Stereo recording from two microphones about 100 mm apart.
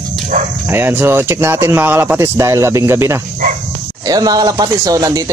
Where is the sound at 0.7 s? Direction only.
20° right (ahead or behind).